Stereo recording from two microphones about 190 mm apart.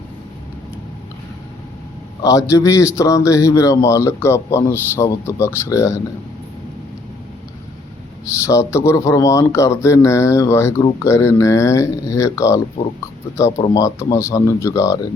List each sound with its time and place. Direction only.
2.2 s speech: 15° left (ahead or behind)
8.4 s speech: 15° left (ahead or behind)
13.7 s speech: 15° left (ahead or behind)